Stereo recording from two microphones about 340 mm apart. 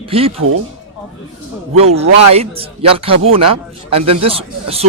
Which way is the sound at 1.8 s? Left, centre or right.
Centre.